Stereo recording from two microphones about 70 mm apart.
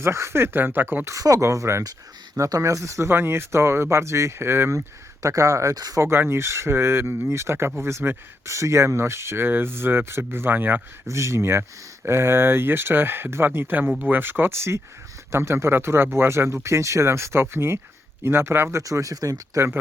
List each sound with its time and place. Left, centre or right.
0.0 s speech: right
1.0 s speech: right
5.2 s speech: right
5.7 s speech: right
6.0 s speech: right
11.0 s speech: right
18.8 s speech: right
19.5 s speech: right